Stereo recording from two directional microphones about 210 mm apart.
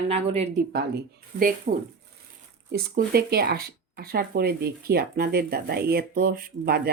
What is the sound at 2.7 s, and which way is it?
Speech, 50° right (ahead or behind).